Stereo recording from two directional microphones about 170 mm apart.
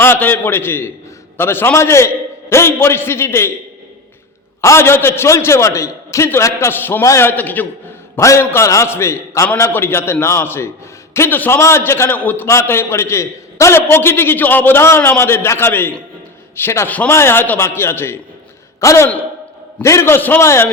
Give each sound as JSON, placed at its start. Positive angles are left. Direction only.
{"t": 0.0, "sound": "a man's voice", "side_deg": 10}
{"t": 4.6, "sound": "a man's voice", "side_deg": 15}